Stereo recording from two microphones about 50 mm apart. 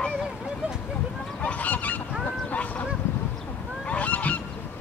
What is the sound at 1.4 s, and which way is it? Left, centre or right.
Goose, left.